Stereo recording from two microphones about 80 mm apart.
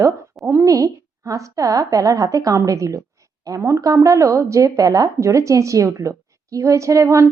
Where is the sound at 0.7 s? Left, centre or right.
Right.